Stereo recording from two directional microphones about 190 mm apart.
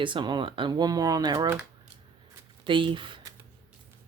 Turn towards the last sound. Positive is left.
turn(degrees=-25)  # may be behind; listen again after turning